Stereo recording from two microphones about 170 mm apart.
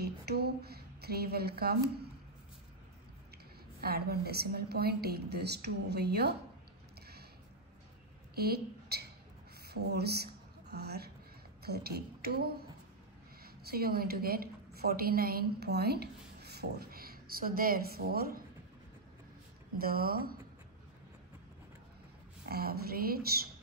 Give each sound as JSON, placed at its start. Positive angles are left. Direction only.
{"t": 0.0, "sound": "a sound", "side_deg": -70}
{"t": 3.8, "sound": "a woman's voice", "side_deg": -65}
{"t": 8.4, "sound": "a woman's voice", "side_deg": -65}
{"t": 19.8, "sound": "speech", "side_deg": -60}
{"t": 22.5, "sound": "speech", "side_deg": -65}